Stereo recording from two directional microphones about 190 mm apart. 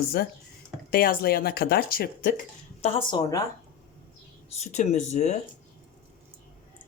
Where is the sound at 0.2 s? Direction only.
55° left (ahead or behind).